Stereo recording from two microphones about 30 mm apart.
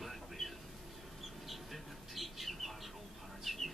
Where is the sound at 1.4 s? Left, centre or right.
Centre.